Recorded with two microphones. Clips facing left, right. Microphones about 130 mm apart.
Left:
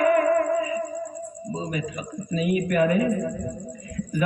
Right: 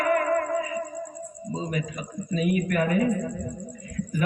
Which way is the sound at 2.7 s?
40° right (ahead or behind).